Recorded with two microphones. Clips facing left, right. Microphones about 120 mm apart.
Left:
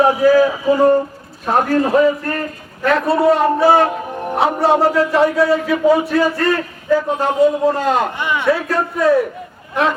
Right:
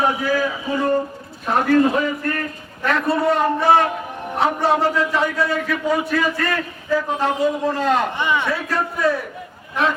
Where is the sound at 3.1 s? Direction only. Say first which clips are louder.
Left 4 dB; 30° left (ahead or behind).